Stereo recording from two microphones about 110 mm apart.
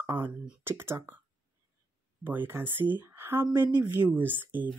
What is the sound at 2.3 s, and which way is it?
A woman's voice, 20° right (ahead or behind).